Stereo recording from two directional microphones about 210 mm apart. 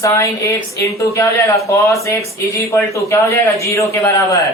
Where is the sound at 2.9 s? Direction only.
15° left (ahead or behind).